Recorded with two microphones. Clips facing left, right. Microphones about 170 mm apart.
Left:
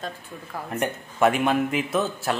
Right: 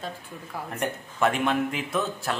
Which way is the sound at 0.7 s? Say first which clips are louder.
Left 4 dB; 5° left (ahead or behind).